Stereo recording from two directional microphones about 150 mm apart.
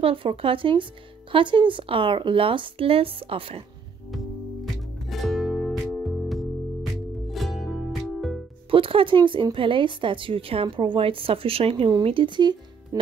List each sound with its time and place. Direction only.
0.0 s speech: 35° right (ahead or behind)
5.0 s music: centre (ahead or behind)
8.6 s speech: 35° right (ahead or behind)